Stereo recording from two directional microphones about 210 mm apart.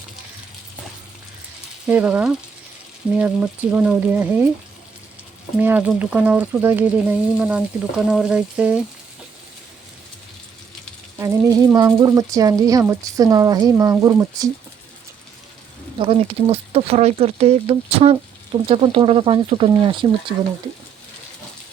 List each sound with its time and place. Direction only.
1.9 s speech: 5° right (ahead or behind)
5.5 s speech: 10° right (ahead or behind)
11.2 s speech: 15° right (ahead or behind)
16.0 s speech: 25° right (ahead or behind)